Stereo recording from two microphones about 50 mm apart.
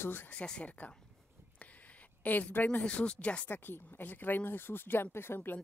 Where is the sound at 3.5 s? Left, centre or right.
Left.